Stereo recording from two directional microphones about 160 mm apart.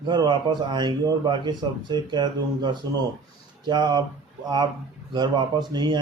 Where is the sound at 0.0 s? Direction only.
25° right (ahead or behind).